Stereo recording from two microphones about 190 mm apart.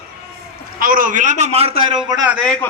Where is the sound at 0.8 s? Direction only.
45° right (ahead or behind).